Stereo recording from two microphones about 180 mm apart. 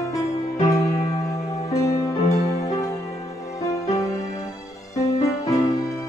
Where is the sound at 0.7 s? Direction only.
15° left (ahead or behind).